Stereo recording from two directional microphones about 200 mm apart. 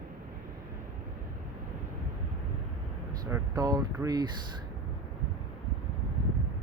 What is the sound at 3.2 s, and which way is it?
Speech, 15° right (ahead or behind).